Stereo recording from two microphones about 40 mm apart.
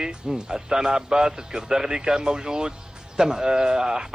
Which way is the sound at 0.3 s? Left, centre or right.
Centre.